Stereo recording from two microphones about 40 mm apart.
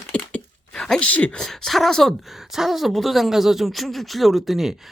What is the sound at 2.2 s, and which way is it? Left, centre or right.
Speech, centre.